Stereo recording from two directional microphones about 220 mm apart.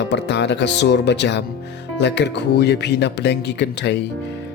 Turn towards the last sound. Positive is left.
turn(degrees=50)  # may be behind; listen again after turning